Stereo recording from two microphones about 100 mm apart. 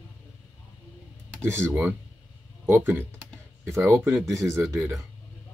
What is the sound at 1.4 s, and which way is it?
Speech, 25° right (ahead or behind).